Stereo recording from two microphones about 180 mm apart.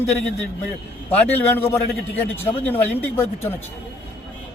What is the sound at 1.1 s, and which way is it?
A man's voice, 10° left (ahead or behind).